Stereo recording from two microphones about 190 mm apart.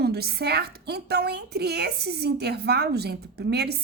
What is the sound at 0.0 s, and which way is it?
A woman's voice, 55° right (ahead or behind).